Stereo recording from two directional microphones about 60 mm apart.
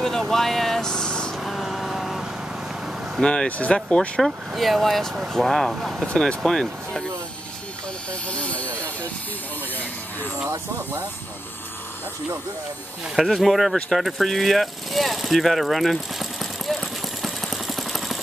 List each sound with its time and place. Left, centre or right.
0.0 s vehicle: centre
1.3 s vehicle: centre
3.2 s speech: centre
4.6 s speech: centre
5.7 s speech: centre
6.1 s speech: centre
8.3 s a sound: left
13.1 s speech: centre
13.8 s vehicle: centre